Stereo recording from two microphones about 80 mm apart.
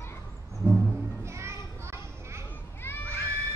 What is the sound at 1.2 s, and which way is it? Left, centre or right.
Children playing, right.